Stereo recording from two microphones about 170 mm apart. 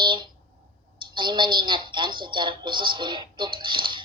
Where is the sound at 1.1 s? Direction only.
30° right (ahead or behind).